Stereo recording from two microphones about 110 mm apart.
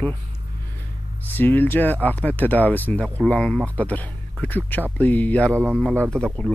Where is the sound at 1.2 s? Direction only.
15° left (ahead or behind).